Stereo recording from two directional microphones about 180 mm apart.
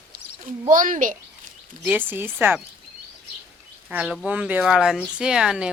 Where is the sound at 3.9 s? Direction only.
5° right (ahead or behind).